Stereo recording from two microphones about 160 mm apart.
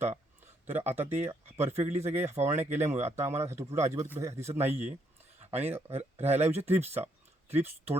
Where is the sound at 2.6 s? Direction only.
45° right (ahead or behind).